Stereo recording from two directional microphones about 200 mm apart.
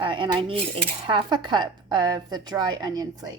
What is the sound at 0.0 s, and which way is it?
Speech, 25° right (ahead or behind).